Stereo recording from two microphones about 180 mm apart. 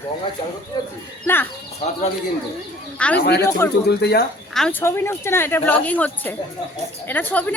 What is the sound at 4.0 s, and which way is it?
Speech, 65° left (ahead or behind).